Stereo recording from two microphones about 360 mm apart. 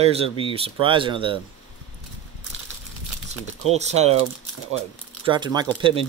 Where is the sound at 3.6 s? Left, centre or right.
Centre.